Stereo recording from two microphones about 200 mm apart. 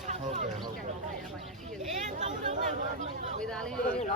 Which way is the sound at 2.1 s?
35° right (ahead or behind).